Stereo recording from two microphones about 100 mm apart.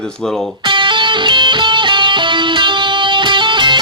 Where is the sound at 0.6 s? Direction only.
55° right (ahead or behind).